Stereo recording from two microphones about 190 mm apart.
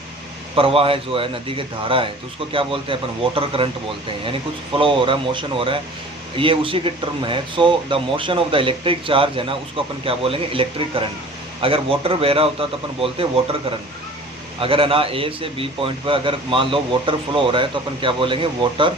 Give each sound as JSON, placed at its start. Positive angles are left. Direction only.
{"t": 0.5, "sound": "speech", "side_deg": -30}
{"t": 4.8, "sound": "speech", "side_deg": -25}
{"t": 14.6, "sound": "speech", "side_deg": -30}